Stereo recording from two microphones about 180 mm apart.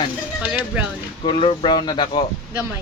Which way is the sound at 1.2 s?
30° left (ahead or behind).